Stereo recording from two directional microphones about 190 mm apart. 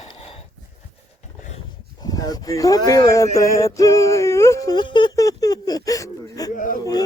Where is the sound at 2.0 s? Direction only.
20° left (ahead or behind).